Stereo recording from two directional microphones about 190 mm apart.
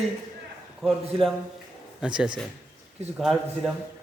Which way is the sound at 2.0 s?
5° right (ahead or behind).